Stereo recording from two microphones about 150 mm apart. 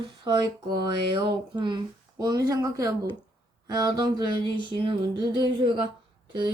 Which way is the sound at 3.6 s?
25° right (ahead or behind).